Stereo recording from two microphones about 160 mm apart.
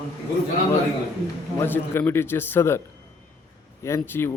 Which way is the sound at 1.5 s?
15° left (ahead or behind).